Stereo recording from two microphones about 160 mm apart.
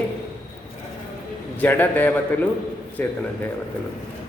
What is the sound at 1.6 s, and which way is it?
A man's voice, 10° left (ahead or behind).